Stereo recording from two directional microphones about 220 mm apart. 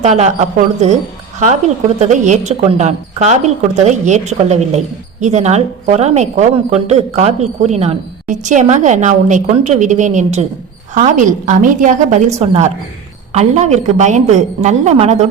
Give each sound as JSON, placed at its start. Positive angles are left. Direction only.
{"t": 0.0, "sound": "a woman's voice", "side_deg": -30}
{"t": 2.0, "sound": "a woman's voice", "side_deg": -35}